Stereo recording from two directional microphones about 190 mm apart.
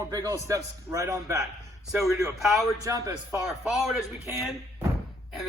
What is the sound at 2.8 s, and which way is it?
Speech, 15° right (ahead or behind).